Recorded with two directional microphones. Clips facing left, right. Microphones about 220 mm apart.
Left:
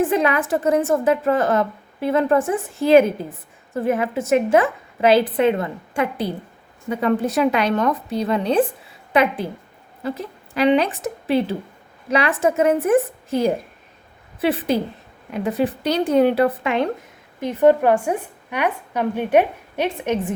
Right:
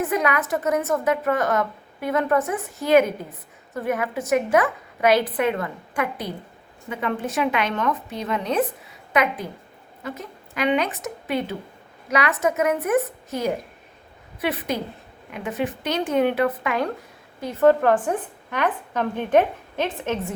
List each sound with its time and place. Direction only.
0.0 s a woman's voice: 30° left (ahead or behind)
17.4 s a woman's voice: 15° left (ahead or behind)